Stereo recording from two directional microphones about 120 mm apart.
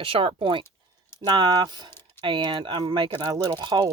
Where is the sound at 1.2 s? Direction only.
35° right (ahead or behind).